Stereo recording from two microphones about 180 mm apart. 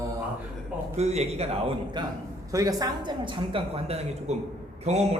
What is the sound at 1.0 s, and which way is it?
A man's voice, 35° right (ahead or behind).